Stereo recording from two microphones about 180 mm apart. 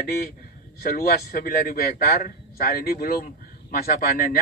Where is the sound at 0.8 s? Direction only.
55° left (ahead or behind).